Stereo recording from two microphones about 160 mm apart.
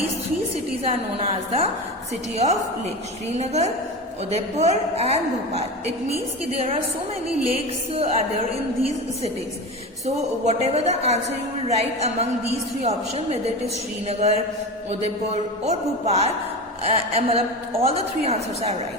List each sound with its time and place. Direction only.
0.9 s a woman's voice: 40° right (ahead or behind)
7.9 s a woman's voice: 40° right (ahead or behind)
10.4 s a woman's voice: 40° right (ahead or behind)
15.6 s a woman's voice: 40° right (ahead or behind)